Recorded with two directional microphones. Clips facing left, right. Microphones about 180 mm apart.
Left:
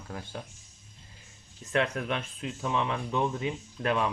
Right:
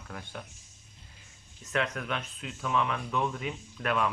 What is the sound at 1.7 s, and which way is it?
Speech, 35° left (ahead or behind).